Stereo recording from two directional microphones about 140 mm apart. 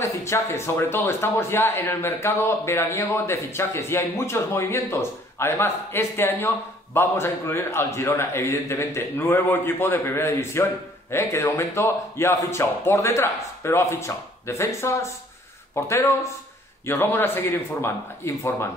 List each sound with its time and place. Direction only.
0.0 s speech: 20° left (ahead or behind)